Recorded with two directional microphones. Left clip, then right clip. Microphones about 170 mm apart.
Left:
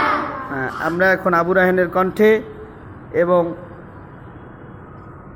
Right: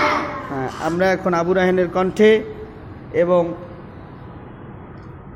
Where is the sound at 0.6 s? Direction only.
5° right (ahead or behind).